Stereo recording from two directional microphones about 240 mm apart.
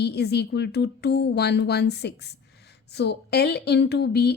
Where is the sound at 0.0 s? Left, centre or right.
Left.